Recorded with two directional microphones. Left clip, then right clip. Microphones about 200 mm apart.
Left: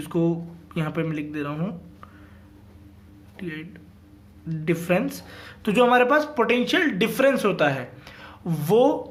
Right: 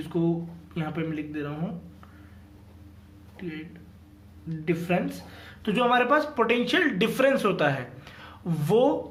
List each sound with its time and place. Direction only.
0.0 s speech: 40° left (ahead or behind)
3.3 s speech: 35° left (ahead or behind)
4.6 s speech: 40° left (ahead or behind); by 9.0 s 20° left (ahead or behind)